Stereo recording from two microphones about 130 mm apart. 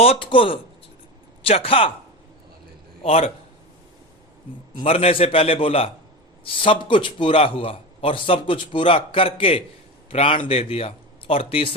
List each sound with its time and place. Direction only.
0.0 s a man's voice: 45° left (ahead or behind)
3.0 s a man's voice: 50° left (ahead or behind)
4.8 s a man's voice: 50° left (ahead or behind)